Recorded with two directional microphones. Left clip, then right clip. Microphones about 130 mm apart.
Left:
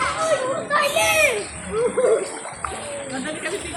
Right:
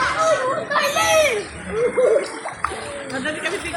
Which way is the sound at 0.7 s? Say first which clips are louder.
Left 1 dB; 10° left (ahead or behind).